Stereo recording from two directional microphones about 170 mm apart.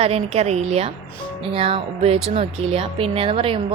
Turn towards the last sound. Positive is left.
turn(degrees=-30)  # may be behind; listen again after turning